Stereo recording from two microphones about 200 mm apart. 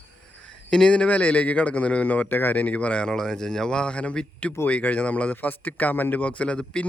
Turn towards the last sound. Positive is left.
turn(degrees=5)  # may be behind; listen again after turning